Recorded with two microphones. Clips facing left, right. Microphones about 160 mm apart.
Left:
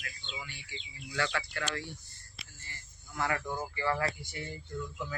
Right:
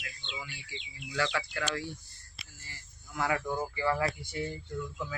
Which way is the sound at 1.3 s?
10° right (ahead or behind).